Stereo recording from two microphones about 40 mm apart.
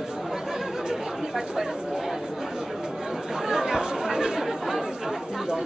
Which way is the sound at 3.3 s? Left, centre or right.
Centre.